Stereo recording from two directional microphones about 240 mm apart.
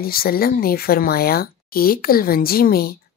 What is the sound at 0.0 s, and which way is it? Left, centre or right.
Speech, left.